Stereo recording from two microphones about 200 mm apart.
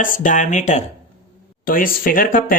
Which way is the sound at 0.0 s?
40° left (ahead or behind).